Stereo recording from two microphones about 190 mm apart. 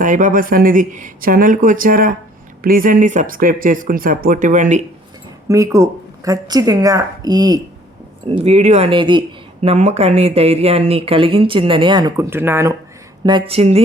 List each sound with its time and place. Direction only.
0.0 s speech: 40° right (ahead or behind)
5.5 s speech: 15° right (ahead or behind)
8.4 s speech: 35° right (ahead or behind); by 12.7 s 10° right (ahead or behind)
13.2 s speech: 30° right (ahead or behind)